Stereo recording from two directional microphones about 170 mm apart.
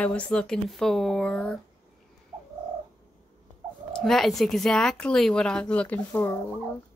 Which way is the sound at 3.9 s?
Centre (ahead or behind).